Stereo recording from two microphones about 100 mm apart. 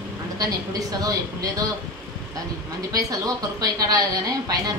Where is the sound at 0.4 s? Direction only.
35° right (ahead or behind).